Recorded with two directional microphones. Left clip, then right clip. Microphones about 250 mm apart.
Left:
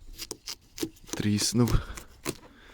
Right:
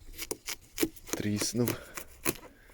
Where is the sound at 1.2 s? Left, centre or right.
Left.